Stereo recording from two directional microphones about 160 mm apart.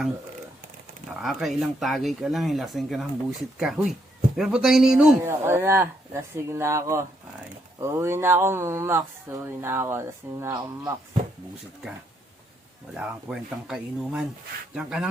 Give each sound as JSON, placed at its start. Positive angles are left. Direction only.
{"t": 1.2, "sound": "speech", "side_deg": 0}
{"t": 5.2, "sound": "speech", "side_deg": -15}
{"t": 13.0, "sound": "speech", "side_deg": -10}